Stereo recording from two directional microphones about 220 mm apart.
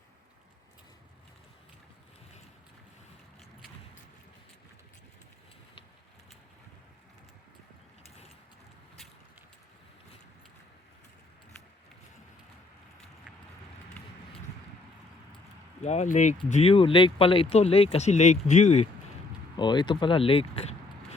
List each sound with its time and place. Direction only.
15.8 s speech: 30° left (ahead or behind)
19.5 s speech: 20° left (ahead or behind)